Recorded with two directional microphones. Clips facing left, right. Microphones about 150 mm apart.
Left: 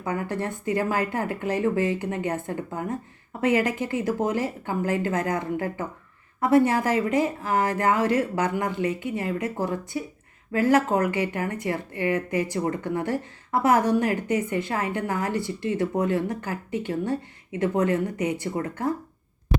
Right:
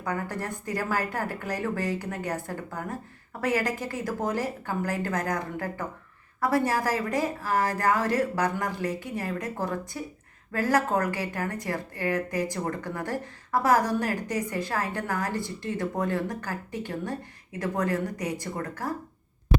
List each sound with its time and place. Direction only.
0.0 s speech: 20° left (ahead or behind)